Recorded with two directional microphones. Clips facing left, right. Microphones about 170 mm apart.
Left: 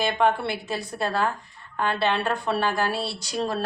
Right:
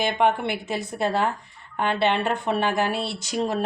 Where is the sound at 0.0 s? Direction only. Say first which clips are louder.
Right 1 dB; 20° right (ahead or behind).